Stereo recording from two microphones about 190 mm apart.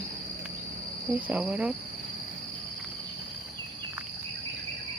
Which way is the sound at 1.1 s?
10° right (ahead or behind).